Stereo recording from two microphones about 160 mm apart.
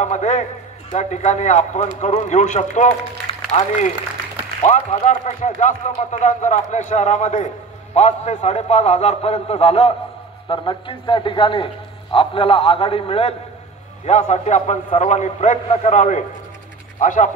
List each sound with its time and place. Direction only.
0.0 s speech: 45° left (ahead or behind)
3.5 s a man's voice: 35° left (ahead or behind)
4.6 s speech: 50° left (ahead or behind)
10.5 s a man's voice: 30° left (ahead or behind)
14.0 s speech: 45° left (ahead or behind)